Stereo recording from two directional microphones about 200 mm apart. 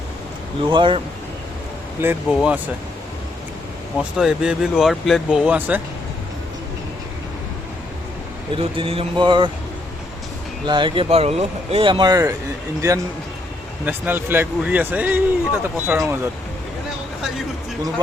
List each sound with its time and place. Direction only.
0.6 s speech: 25° right (ahead or behind)
2.0 s speech: 10° right (ahead or behind)
3.9 s speech: centre (ahead or behind)
8.5 s speech: 25° right (ahead or behind)
10.7 s speech: 25° right (ahead or behind)